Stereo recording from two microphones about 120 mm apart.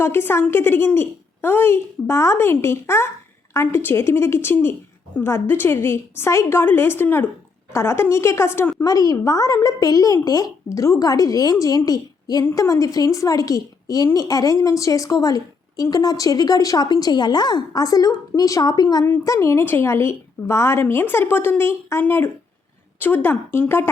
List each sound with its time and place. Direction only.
0.0 s a woman's voice: 20° left (ahead or behind)
19.0 s a woman's voice: 20° left (ahead or behind)